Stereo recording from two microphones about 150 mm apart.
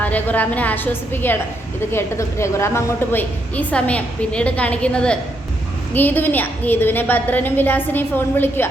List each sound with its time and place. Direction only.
0.0 s a woman's voice: 10° left (ahead or behind)